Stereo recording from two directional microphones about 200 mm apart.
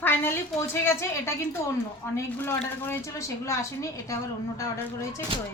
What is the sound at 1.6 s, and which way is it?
A woman's voice, 15° left (ahead or behind).